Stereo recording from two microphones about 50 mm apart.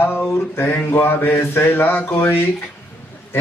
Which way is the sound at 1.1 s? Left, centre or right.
Left.